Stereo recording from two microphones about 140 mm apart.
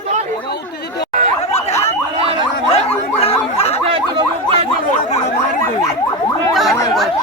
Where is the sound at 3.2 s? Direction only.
50° left (ahead or behind).